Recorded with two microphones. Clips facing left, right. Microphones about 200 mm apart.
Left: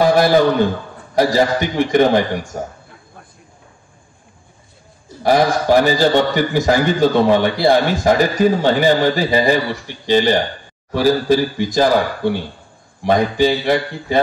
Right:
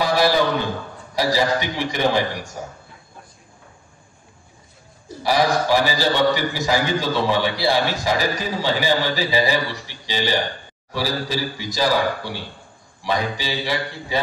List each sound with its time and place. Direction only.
0.0 s a sound: 50° left (ahead or behind)
1.1 s a man's voice: 50° left (ahead or behind)
5.2 s a man's voice: 50° left (ahead or behind)